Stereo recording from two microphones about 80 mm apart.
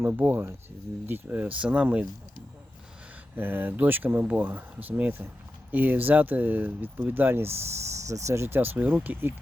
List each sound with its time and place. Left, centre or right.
0.0 s speech: right
3.3 s speech: right
8.0 s speech: right